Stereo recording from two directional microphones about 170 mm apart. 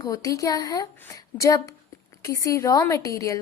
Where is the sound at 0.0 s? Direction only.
20° left (ahead or behind).